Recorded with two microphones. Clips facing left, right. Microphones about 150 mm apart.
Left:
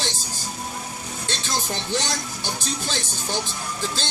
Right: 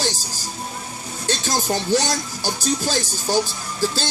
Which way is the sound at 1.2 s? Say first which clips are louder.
Right 7 dB; 40° right (ahead or behind).